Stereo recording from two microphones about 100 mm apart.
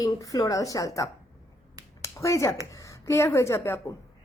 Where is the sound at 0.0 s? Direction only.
35° left (ahead or behind).